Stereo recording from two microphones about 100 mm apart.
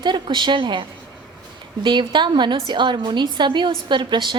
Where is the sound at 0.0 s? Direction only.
50° right (ahead or behind).